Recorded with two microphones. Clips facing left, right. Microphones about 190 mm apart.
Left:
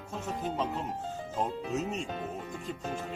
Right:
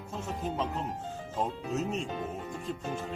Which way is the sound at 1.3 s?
Centre (ahead or behind).